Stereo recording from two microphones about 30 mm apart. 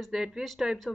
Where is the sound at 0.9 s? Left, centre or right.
Centre.